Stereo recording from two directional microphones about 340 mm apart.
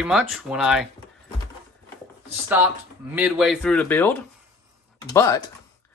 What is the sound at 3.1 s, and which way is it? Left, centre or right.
Speech, centre.